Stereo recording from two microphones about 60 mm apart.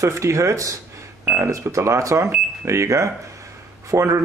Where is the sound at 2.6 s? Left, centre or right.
Right.